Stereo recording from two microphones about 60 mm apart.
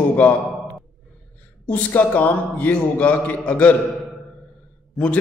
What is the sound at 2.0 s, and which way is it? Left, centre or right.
A man's voice, left.